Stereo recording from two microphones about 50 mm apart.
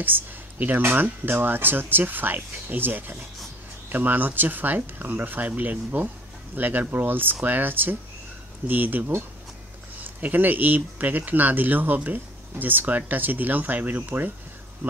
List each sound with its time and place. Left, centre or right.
0.0 s speech: right